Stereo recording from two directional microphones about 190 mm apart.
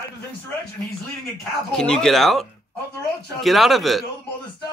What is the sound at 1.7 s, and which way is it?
Speech, 5° left (ahead or behind).